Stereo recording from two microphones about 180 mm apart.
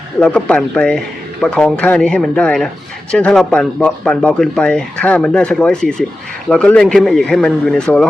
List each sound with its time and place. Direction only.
0.2 s speech: 5° left (ahead or behind)